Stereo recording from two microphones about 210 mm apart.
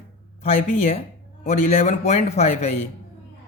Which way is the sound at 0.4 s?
35° left (ahead or behind).